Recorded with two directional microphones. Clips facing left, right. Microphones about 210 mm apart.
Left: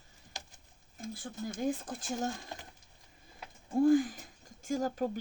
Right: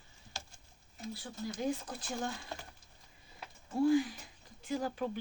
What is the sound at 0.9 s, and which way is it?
Speech, 50° left (ahead or behind).